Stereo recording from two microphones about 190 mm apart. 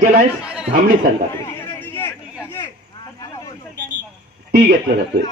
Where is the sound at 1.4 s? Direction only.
10° left (ahead or behind).